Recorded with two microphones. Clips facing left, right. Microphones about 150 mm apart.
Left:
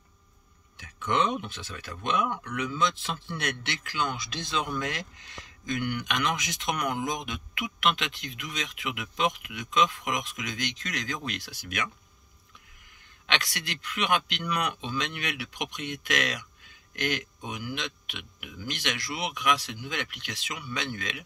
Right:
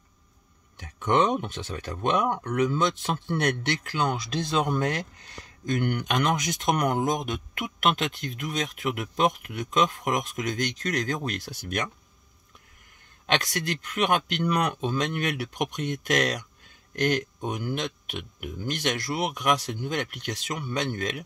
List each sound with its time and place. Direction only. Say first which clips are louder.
0.7 s speech: right 4 dB; 45° right (ahead or behind)
13.3 s speech: right 6 dB; 45° right (ahead or behind)